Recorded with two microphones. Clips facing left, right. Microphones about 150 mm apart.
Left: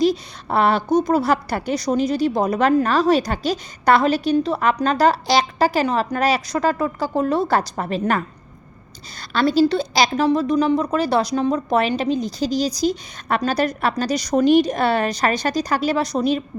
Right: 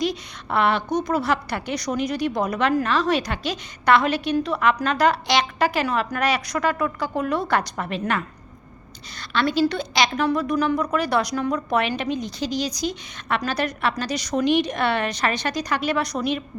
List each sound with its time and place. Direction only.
0.0 s a sound: 35° left (ahead or behind)
0.9 s a woman's voice: 30° left (ahead or behind)
9.3 s a woman's voice: 40° left (ahead or behind)